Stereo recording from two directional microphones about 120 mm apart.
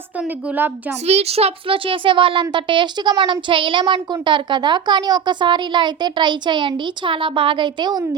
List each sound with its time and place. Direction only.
0.2 s a woman's voice: 10° right (ahead or behind)
1.0 s a child's voice: 60° right (ahead or behind); by 8.0 s 40° right (ahead or behind)